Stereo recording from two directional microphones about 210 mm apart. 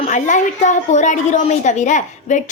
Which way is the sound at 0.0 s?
35° left (ahead or behind).